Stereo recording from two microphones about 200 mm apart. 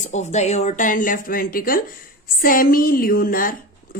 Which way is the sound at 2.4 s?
45° left (ahead or behind).